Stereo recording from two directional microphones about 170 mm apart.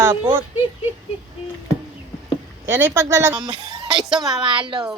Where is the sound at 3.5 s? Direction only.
25° right (ahead or behind).